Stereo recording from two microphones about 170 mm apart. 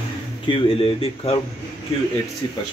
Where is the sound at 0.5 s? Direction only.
30° left (ahead or behind).